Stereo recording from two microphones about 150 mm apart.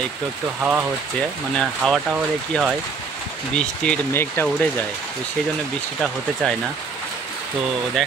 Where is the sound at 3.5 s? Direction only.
10° left (ahead or behind).